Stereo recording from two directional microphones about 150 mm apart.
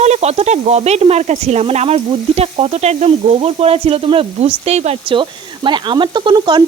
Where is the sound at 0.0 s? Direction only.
45° right (ahead or behind).